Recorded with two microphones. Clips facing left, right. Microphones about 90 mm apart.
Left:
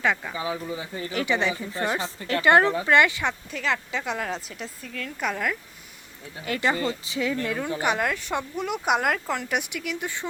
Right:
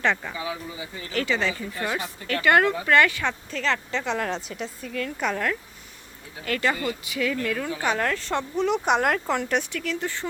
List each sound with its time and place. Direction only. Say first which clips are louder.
0.0 s speech: even; 5° left (ahead or behind)
0.3 s speech: left 2 dB; 30° left (ahead or behind)
1.1 s speech: even; 20° left (ahead or behind)
6.4 s speech: even; 20° left (ahead or behind); by 9.6 s centre (ahead or behind)
9.6 s speech: right 2 dB; 15° left (ahead or behind)